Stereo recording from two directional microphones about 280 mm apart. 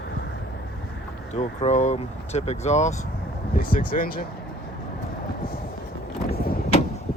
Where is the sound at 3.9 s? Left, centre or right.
Left.